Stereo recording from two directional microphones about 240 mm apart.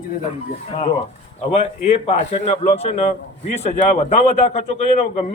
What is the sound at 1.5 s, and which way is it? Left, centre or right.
A man's voice, left.